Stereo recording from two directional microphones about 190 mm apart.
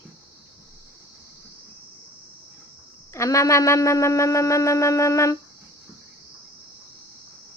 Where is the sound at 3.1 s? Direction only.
15° left (ahead or behind).